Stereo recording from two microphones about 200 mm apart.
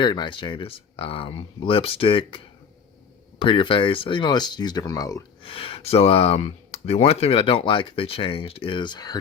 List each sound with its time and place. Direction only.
0.0 s speech: 25° left (ahead or behind)